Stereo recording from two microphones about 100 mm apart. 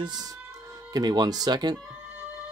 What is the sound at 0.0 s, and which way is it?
Speech, 45° right (ahead or behind).